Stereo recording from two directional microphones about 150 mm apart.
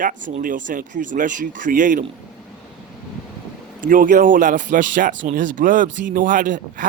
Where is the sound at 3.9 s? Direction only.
65° right (ahead or behind).